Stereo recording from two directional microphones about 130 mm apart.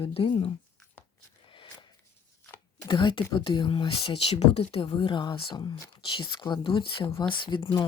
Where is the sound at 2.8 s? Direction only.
40° left (ahead or behind).